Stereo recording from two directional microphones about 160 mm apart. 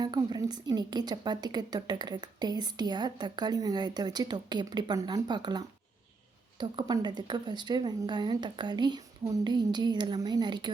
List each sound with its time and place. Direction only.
0.0 s a woman's voice: 25° right (ahead or behind)